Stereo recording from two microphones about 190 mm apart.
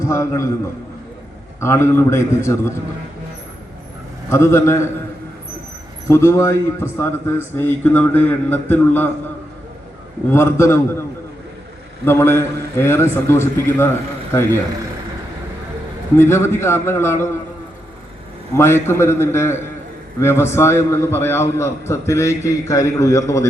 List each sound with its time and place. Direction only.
0.0 s a man's voice: 15° left (ahead or behind)
4.3 s a man's voice: 15° left (ahead or behind)
6.1 s a man's voice: 15° left (ahead or behind)
10.2 s a man's voice: 15° left (ahead or behind)
12.0 s a man's voice: 10° left (ahead or behind)
16.1 s a man's voice: 15° left (ahead or behind)
18.5 s a man's voice: 15° left (ahead or behind)